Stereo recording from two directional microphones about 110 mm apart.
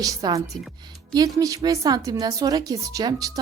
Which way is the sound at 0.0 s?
35° right (ahead or behind).